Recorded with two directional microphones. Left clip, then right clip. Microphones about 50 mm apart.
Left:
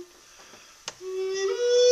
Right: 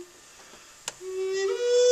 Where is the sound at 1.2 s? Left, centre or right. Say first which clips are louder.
Left 1 dB; left.